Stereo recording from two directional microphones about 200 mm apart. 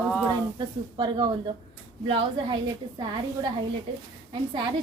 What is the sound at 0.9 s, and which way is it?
Speech, 25° right (ahead or behind).